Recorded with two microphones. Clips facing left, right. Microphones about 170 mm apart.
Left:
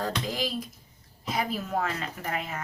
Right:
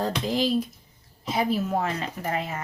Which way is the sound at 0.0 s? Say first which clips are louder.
Right 5 dB; 30° right (ahead or behind).